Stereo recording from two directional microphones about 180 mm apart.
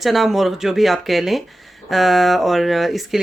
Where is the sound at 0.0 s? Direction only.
Centre (ahead or behind).